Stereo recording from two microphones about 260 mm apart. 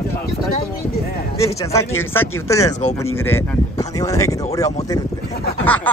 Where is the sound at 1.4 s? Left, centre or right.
Centre.